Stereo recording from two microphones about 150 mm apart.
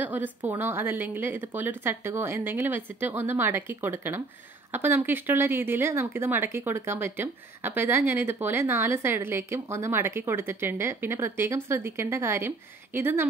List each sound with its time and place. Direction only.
0.0 s speech: 10° right (ahead or behind)